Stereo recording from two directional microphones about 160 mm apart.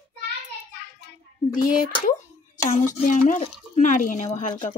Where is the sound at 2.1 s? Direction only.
55° left (ahead or behind).